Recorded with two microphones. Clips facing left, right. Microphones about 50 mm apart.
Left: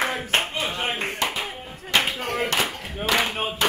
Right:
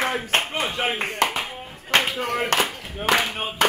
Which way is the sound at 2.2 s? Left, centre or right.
Right.